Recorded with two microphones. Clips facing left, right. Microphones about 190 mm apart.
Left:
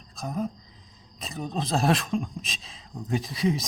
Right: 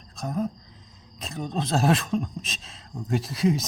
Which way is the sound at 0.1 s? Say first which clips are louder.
Right 2 dB; centre (ahead or behind).